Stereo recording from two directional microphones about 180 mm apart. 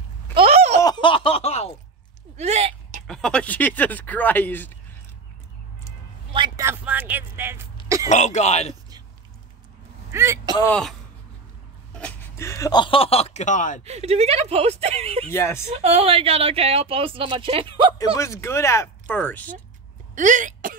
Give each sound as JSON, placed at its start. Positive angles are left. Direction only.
{"t": 0.3, "sound": "a sound", "side_deg": -30}
{"t": 0.7, "sound": "a sound", "side_deg": 25}
{"t": 2.3, "sound": "a sound", "side_deg": -35}
{"t": 3.1, "sound": "speech", "side_deg": 5}
{"t": 6.3, "sound": "a sound", "side_deg": -25}
{"t": 6.6, "sound": "speech", "side_deg": -10}
{"t": 8.1, "sound": "speech", "side_deg": 40}
{"t": 10.1, "sound": "speech", "side_deg": -15}
{"t": 10.7, "sound": "speech", "side_deg": 0}
{"t": 13.8, "sound": "speech", "side_deg": -35}
{"t": 15.2, "sound": "speech", "side_deg": 15}
{"t": 15.6, "sound": "speech", "side_deg": -35}
{"t": 17.9, "sound": "speech", "side_deg": 20}
{"t": 20.2, "sound": "speech", "side_deg": -45}